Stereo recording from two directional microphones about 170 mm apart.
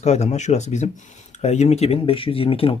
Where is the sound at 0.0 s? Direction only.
40° left (ahead or behind).